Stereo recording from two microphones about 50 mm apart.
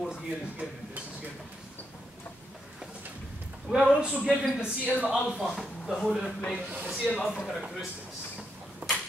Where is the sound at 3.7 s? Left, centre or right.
Centre.